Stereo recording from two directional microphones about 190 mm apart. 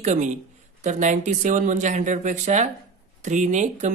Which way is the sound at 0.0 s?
40° right (ahead or behind).